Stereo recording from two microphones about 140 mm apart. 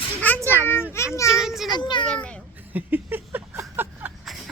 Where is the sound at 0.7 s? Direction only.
15° left (ahead or behind).